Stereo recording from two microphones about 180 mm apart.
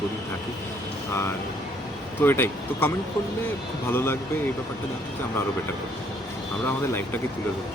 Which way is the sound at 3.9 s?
10° left (ahead or behind).